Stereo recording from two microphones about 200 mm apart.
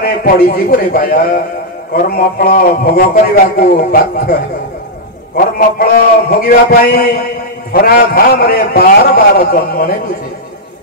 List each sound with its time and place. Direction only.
0.0 s a man's voice: 45° left (ahead or behind)
5.4 s a man's voice: 45° left (ahead or behind)